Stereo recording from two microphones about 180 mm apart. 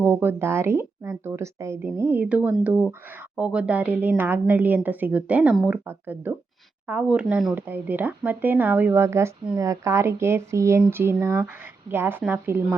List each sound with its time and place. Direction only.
0.0 s a woman's voice: 10° right (ahead or behind)